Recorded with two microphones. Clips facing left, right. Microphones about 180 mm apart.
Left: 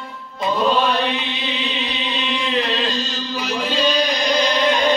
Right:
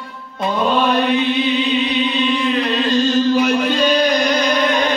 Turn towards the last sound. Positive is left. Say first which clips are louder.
# right 8 dB
turn(degrees=-55)  # may be behind; listen again after turning